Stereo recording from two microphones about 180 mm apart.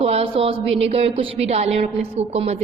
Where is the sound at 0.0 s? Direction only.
35° right (ahead or behind).